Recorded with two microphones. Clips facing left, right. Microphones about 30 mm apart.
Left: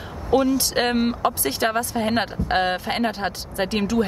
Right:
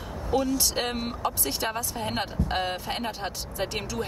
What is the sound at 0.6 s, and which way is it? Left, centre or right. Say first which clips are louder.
Speech: left 7 dB; left.